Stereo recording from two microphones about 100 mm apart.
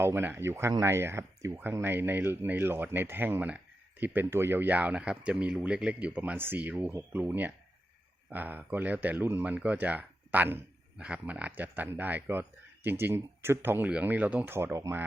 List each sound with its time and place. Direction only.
0.0 s speech: 25° right (ahead or behind)